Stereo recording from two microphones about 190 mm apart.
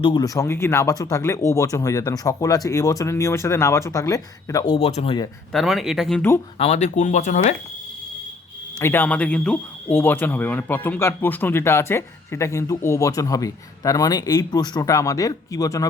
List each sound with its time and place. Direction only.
0.0 s speech: 25° left (ahead or behind)
5.5 s speech: centre (ahead or behind)
6.6 s speech: 35° left (ahead or behind)
8.8 s speech: 10° left (ahead or behind)